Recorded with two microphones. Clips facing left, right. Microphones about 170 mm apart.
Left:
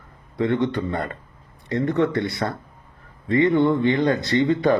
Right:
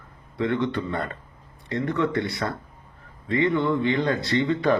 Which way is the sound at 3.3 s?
45° left (ahead or behind).